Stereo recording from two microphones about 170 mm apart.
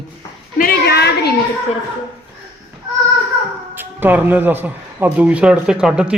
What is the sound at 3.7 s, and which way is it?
A man's voice, 10° right (ahead or behind).